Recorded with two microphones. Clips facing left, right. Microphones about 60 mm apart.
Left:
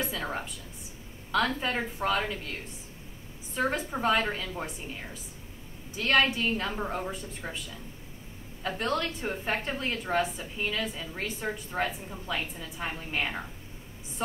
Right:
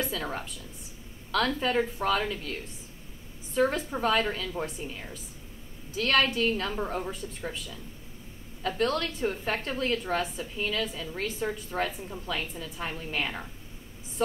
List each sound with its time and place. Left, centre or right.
0.0 s a sound: centre
1.3 s a woman's voice: centre
3.5 s a woman's voice: centre
5.9 s a woman's voice: centre
8.6 s a woman's voice: centre